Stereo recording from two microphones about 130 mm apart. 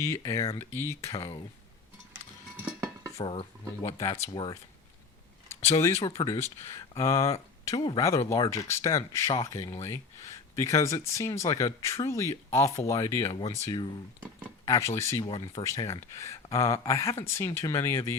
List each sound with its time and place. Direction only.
0.0 s speech: 20° left (ahead or behind)
3.2 s stir: 45° left (ahead or behind)
3.9 s speech: 25° left (ahead or behind)
5.6 s speech: 25° left (ahead or behind)